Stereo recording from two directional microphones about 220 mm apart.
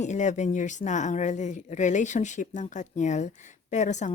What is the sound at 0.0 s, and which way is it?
Speech, 35° left (ahead or behind).